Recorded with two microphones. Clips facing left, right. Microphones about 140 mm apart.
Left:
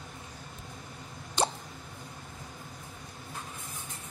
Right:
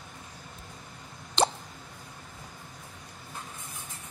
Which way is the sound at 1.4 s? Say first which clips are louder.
Right 4 dB; 90° right.